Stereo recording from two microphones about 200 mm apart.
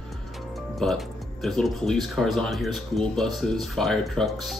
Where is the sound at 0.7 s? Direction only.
Centre (ahead or behind).